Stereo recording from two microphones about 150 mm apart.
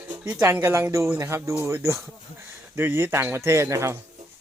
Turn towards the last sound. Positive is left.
turn(degrees=-20)  # may be behind; listen again after turning